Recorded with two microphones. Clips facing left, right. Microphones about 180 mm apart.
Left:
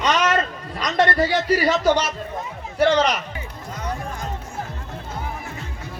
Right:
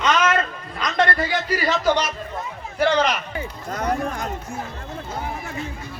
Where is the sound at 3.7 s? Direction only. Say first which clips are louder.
Right 6 dB; 70° right (ahead or behind).